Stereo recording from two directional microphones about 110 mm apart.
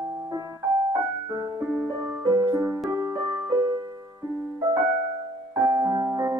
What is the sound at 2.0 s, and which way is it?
Music, 20° right (ahead or behind).